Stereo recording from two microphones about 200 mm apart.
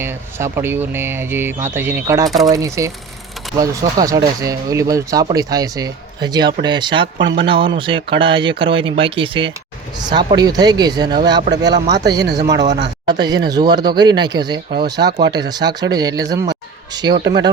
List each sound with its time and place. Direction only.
0.0 s a man's voice: 10° right (ahead or behind)
7.2 s speech: 65° right (ahead or behind)
7.4 s a man's voice: 25° right (ahead or behind)